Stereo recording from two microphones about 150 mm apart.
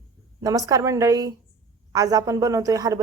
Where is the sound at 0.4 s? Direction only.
25° right (ahead or behind).